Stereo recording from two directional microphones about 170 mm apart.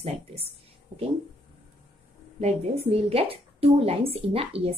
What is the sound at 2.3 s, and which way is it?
Speech, 35° right (ahead or behind).